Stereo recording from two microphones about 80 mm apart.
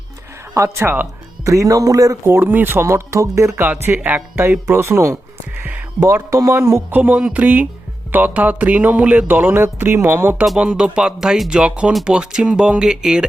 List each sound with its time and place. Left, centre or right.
0.5 s speech: right
1.5 s speech: right
2.2 s speech: right
2.8 s speech: right
3.7 s speech: right
6.3 s speech: right
6.9 s speech: centre
10.6 s speech: centre